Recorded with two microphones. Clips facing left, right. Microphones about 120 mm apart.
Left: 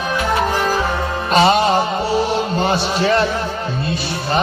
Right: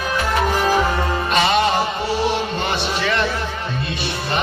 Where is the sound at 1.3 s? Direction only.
35° left (ahead or behind).